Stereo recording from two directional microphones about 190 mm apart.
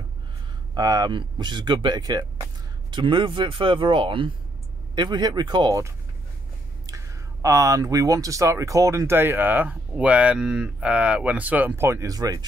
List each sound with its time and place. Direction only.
0.7 s speech: 20° right (ahead or behind)